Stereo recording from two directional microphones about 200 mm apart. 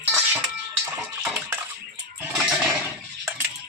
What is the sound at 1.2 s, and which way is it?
Bathtub, 10° right (ahead or behind).